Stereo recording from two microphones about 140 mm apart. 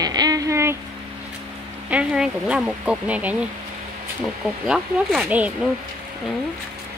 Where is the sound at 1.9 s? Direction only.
10° right (ahead or behind).